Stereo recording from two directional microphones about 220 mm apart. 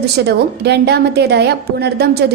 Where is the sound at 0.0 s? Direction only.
50° right (ahead or behind).